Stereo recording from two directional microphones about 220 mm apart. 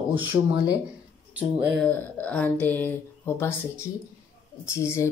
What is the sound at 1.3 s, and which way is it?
Speech, 5° right (ahead or behind).